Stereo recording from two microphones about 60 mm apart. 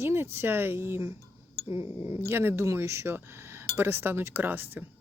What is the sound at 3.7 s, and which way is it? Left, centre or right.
Speech, right.